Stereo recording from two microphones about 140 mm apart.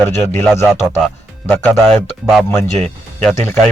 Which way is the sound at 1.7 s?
Centre (ahead or behind).